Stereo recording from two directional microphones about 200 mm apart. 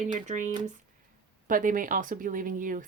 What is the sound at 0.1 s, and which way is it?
A woman's voice, 40° right (ahead or behind).